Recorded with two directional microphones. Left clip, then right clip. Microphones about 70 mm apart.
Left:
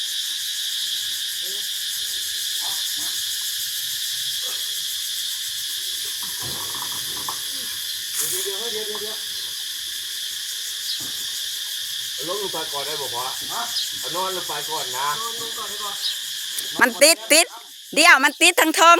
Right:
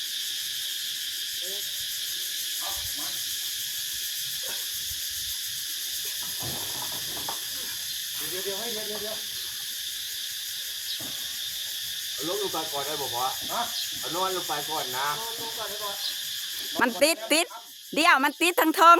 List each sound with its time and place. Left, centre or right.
16.7 s a woman's voice: centre